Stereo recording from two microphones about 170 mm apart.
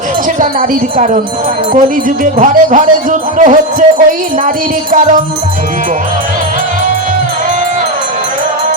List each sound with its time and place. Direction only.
0.3 s speech: 50° right (ahead or behind)